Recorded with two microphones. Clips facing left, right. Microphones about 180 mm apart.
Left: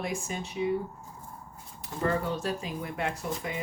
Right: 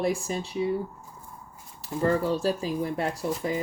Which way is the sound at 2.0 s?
30° right (ahead or behind).